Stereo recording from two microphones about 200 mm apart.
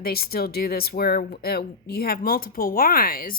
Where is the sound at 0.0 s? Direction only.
50° left (ahead or behind).